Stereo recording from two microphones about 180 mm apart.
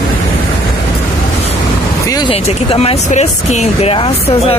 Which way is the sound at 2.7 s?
35° left (ahead or behind).